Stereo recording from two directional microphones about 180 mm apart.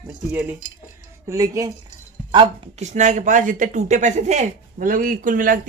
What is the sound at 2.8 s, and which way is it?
Speech, 40° right (ahead or behind).